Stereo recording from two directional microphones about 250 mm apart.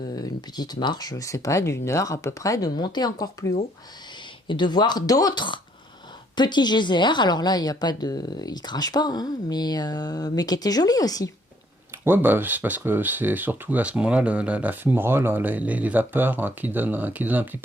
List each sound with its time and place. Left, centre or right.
0.1 s speech: centre
12.0 s speech: centre